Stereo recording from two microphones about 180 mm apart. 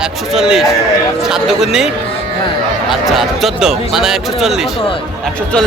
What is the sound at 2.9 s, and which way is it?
A man's voice, centre (ahead or behind).